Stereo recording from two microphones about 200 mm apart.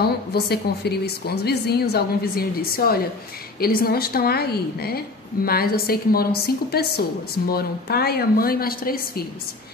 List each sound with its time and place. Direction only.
0.3 s a woman's voice: 55° left (ahead or behind)